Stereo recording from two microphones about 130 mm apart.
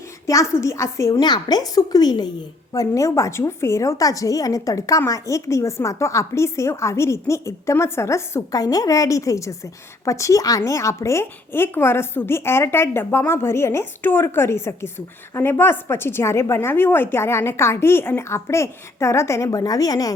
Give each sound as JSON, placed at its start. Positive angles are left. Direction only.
{"t": 0.3, "sound": "a woman's voice", "side_deg": 25}